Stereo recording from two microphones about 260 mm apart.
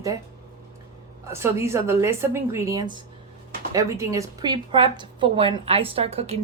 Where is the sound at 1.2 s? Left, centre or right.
Centre.